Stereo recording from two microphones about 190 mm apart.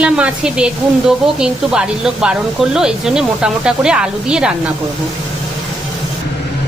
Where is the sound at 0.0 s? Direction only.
5° right (ahead or behind).